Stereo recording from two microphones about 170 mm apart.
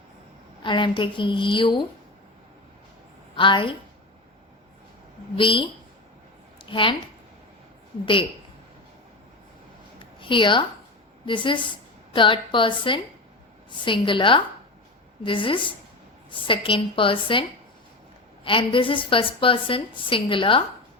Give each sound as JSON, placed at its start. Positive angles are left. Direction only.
{"t": 0.6, "sound": "a woman's voice", "side_deg": 30}
{"t": 3.3, "sound": "a woman's voice", "side_deg": 30}
{"t": 5.4, "sound": "a woman's voice", "side_deg": 30}
{"t": 6.7, "sound": "speech", "side_deg": 30}
{"t": 10.0, "sound": "a sound", "side_deg": 30}
{"t": 11.3, "sound": "a woman's voice", "side_deg": 30}
{"t": 18.4, "sound": "a woman's voice", "side_deg": 30}